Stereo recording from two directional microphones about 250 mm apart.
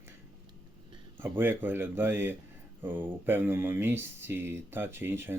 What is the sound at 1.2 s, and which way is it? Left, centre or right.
Speech, centre.